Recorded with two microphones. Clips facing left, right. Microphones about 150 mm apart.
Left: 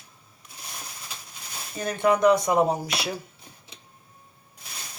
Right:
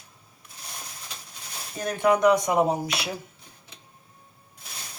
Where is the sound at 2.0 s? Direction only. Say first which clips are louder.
Even; 15° right (ahead or behind).